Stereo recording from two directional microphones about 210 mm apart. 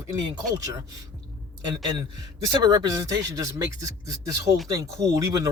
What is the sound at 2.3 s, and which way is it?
Speech, 20° right (ahead or behind).